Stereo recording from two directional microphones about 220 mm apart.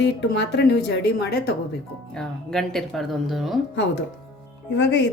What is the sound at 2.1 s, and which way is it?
Speech, 5° left (ahead or behind).